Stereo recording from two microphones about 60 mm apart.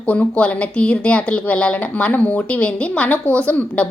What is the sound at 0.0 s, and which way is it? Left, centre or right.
A woman's voice, left.